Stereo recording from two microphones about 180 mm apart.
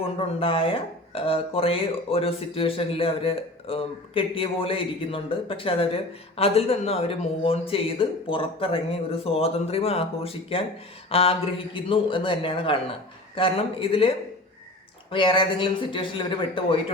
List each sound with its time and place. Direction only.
0.0 s speech: 30° left (ahead or behind)
15.1 s speech: 25° left (ahead or behind)